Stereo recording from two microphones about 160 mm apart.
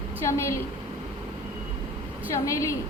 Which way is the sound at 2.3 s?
20° left (ahead or behind).